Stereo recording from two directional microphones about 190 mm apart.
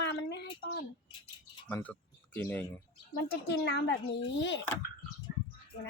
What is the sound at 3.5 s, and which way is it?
A woman's voice, 60° left (ahead or behind).